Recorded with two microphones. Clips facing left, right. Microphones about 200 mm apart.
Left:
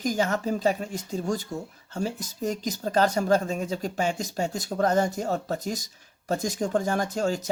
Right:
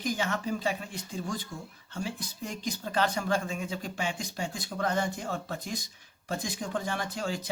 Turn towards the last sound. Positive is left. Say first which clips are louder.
# left 7 dB
turn(degrees=45)  # may be behind; listen again after turning